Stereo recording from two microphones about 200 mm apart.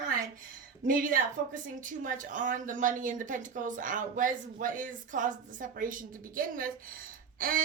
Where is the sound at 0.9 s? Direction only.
45° right (ahead or behind).